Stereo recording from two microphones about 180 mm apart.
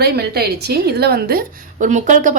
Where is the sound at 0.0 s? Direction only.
60° right (ahead or behind).